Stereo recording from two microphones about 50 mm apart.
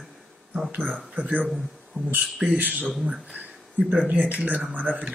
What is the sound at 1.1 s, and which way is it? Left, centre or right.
Speech, right.